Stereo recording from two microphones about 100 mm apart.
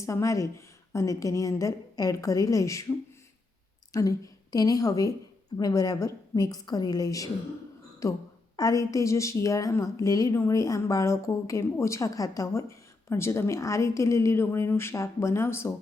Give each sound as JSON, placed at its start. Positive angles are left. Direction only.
{"t": 0.0, "sound": "a woman's voice", "side_deg": 30}
{"t": 3.9, "sound": "a woman's voice", "side_deg": 35}